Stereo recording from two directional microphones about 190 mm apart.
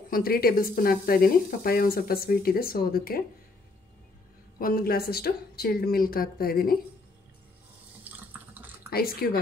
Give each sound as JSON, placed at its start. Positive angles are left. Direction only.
{"t": 0.1, "sound": "speech", "side_deg": 50}
{"t": 4.6, "sound": "speech", "side_deg": 50}
{"t": 8.0, "sound": "water", "side_deg": -10}
{"t": 8.9, "sound": "speech", "side_deg": 50}